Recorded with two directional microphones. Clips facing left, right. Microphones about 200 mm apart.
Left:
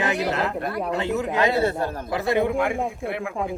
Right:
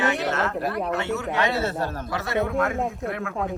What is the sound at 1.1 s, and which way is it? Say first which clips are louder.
Speech: left 3 dB; 15° left (ahead or behind).